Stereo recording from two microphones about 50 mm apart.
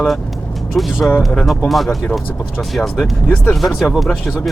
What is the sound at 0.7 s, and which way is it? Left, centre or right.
Speech, centre.